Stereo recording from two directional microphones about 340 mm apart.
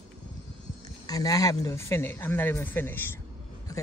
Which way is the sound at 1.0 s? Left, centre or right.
Centre.